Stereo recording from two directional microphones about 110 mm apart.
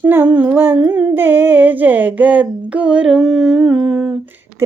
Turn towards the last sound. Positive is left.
turn(degrees=-25)  # may be behind; listen again after turning